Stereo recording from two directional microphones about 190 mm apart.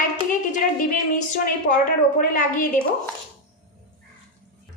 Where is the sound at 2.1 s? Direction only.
45° left (ahead or behind).